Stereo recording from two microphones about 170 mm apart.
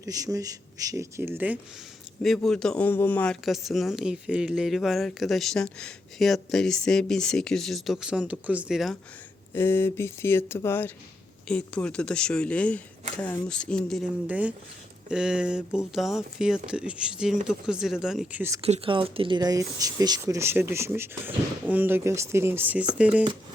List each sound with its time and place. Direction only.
0.0 s speech: 20° right (ahead or behind)
2.2 s speech: centre (ahead or behind)
9.6 s speech: 15° left (ahead or behind)
14.3 s speech: 10° right (ahead or behind)
18.6 s speech: 35° right (ahead or behind); by 23.2 s 10° right (ahead or behind)